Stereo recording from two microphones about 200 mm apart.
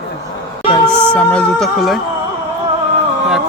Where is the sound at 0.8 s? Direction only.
5° left (ahead or behind).